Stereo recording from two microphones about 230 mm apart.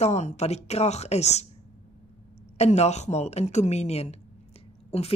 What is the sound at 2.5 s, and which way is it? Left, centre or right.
A woman's voice, left.